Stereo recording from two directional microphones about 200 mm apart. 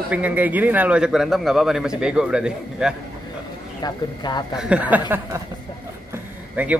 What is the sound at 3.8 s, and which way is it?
Speech, 20° left (ahead or behind).